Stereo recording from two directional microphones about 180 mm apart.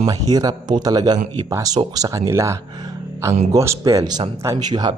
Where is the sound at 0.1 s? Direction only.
20° right (ahead or behind).